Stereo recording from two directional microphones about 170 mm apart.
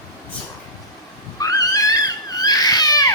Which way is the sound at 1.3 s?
20° left (ahead or behind).